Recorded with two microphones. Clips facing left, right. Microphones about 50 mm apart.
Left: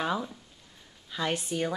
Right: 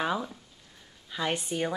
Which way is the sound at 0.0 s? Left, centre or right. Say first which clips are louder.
Right 1 dB; centre.